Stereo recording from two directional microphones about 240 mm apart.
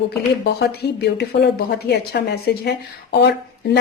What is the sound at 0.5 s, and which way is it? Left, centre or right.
A woman's voice, left.